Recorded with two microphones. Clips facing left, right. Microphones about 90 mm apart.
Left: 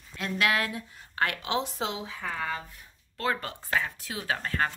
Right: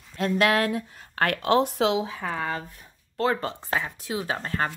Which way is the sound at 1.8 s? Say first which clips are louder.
Right 10 dB; 90° right.